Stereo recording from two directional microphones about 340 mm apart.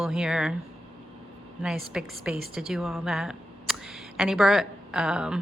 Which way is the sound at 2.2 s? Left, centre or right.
Centre.